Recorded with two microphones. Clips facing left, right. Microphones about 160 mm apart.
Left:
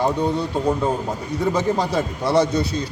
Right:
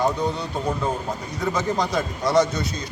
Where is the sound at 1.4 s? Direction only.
30° left (ahead or behind).